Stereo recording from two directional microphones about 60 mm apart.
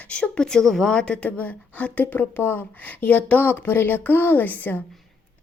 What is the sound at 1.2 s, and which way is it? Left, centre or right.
A woman's voice, left.